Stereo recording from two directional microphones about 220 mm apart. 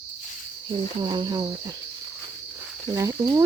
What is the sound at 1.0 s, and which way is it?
Speech, 20° right (ahead or behind).